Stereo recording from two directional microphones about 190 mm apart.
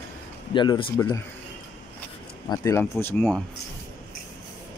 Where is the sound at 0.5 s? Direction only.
25° left (ahead or behind).